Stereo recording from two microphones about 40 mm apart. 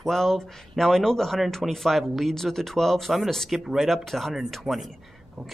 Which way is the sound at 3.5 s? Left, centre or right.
Centre.